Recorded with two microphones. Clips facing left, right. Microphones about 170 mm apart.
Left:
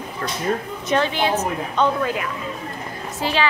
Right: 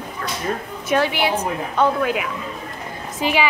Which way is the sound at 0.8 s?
10° right (ahead or behind).